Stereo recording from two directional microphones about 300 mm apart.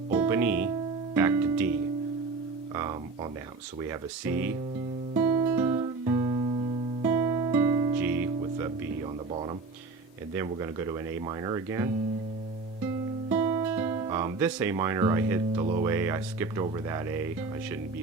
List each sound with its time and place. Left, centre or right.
0.1 s music: centre
3.8 s speech: centre
5.1 s music: centre
10.3 s speech: centre
13.3 s music: centre
15.6 s speech: centre